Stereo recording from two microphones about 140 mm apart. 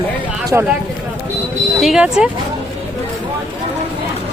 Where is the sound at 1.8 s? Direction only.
5° right (ahead or behind).